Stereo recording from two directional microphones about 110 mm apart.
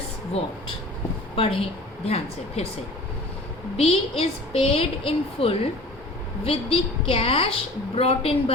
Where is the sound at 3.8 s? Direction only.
65° left (ahead or behind).